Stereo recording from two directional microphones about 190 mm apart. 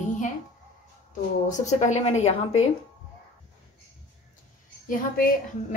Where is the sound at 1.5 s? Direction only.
40° left (ahead or behind).